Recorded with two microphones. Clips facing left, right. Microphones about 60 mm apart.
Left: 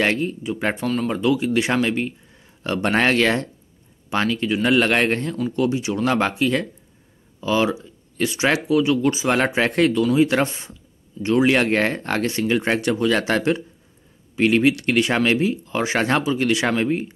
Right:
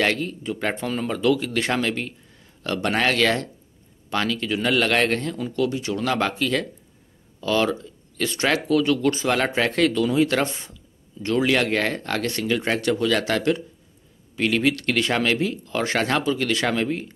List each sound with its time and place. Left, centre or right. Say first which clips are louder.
0.0 s speech: left 2 dB; left
0.4 s speech: left 2 dB; centre
0.8 s speech: left 4 dB; centre
1.1 s speech: even; centre
9.6 s speech: left 2 dB; left
10.5 s speech: even; left